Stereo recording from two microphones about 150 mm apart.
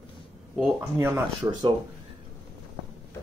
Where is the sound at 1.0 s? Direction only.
15° right (ahead or behind).